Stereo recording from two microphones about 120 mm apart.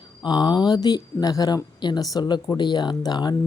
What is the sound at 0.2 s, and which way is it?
Speech, 35° left (ahead or behind).